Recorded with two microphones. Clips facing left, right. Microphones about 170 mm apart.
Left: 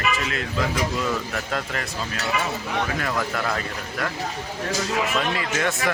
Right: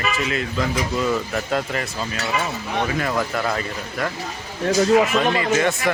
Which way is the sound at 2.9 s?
5° right (ahead or behind).